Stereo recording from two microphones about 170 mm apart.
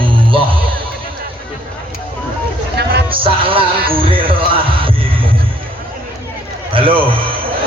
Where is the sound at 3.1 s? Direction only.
30° right (ahead or behind).